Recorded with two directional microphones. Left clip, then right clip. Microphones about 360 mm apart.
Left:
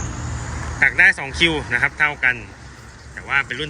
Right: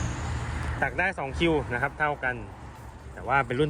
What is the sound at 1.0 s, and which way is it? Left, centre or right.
Speech, centre.